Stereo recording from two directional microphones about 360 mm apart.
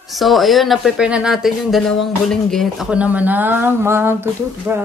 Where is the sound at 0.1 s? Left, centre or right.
Centre.